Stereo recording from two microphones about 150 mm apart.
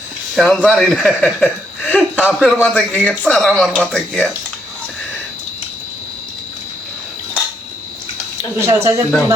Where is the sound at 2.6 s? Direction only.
5° left (ahead or behind).